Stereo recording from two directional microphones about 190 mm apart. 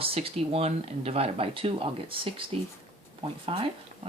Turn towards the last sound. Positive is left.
turn(degrees=-30)  # may be behind; listen again after turning